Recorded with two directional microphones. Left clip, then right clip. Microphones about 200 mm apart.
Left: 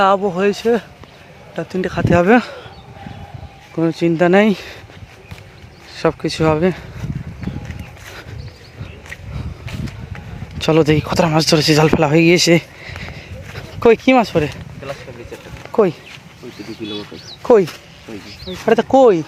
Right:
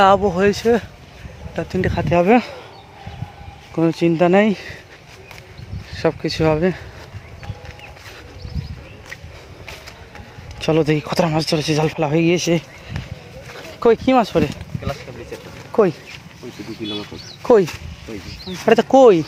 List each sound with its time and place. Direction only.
0.0 s speech: 10° right (ahead or behind)
2.0 s speech: 15° left (ahead or behind)
3.8 s speech: centre (ahead or behind); by 4.8 s 15° left (ahead or behind)
5.9 s speech: 15° left (ahead or behind)
10.6 s speech: 20° left (ahead or behind)
11.3 s speech: 30° left (ahead or behind)
13.7 s speech: 20° left (ahead or behind)
15.7 s speech: 5° left (ahead or behind)
17.4 s speech: 5° left (ahead or behind)